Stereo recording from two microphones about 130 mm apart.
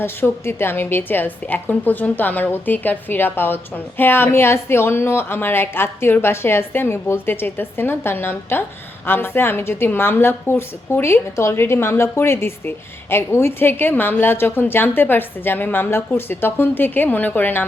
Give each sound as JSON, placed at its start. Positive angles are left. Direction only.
{"t": 0.0, "sound": "a woman's voice", "side_deg": 15}